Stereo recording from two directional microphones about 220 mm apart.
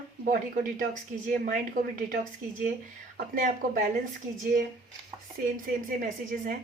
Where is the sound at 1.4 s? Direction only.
40° right (ahead or behind).